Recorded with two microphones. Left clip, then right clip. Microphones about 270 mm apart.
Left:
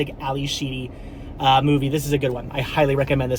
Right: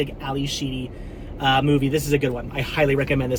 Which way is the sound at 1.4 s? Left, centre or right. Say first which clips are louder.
Left 2 dB; centre.